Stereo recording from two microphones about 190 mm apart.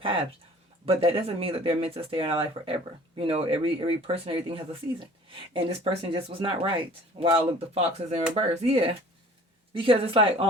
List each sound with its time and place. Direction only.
0.0 s speech: 30° right (ahead or behind)